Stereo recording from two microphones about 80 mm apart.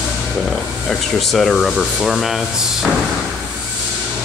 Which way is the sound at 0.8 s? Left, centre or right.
Centre.